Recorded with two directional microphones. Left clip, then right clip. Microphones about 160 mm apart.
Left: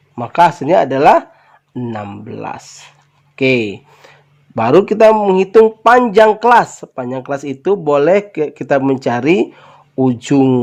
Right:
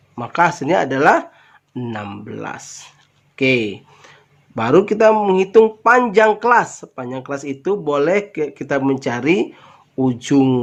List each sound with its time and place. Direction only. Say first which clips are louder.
0.2 s speech: left 5 dB; 40° left (ahead or behind)
3.3 s speech: left 3 dB; 40° left (ahead or behind)